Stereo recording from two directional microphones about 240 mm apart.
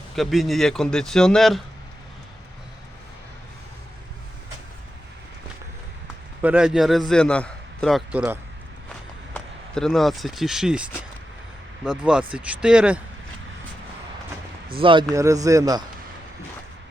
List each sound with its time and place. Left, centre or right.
0.2 s a man's voice: centre
6.4 s a man's voice: centre
11.9 s a man's voice: centre
14.8 s a man's voice: right